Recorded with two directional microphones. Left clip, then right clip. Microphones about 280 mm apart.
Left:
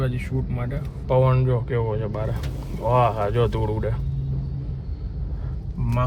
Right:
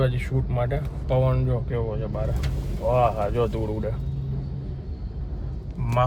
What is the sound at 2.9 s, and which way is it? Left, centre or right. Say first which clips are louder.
Speech: left 1 dB; left.